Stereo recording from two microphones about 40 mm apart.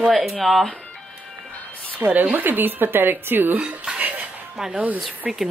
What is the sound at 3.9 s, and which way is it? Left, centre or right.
Dishes, right.